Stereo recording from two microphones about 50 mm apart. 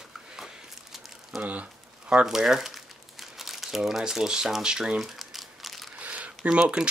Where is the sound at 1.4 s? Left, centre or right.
Right.